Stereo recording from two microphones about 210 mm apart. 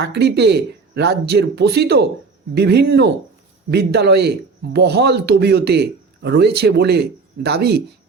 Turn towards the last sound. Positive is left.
turn(degrees=-50)  # may be behind; listen again after turning